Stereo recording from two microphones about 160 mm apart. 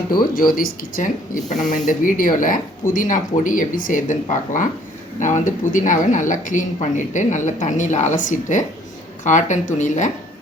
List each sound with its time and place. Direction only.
0.3 s a woman's voice: 60° left (ahead or behind)